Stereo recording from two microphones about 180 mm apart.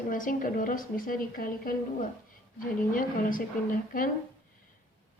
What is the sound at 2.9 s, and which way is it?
A woman's voice, 50° left (ahead or behind).